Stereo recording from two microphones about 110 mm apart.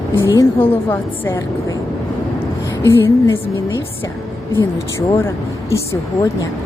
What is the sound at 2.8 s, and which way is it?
Speech, 25° left (ahead or behind).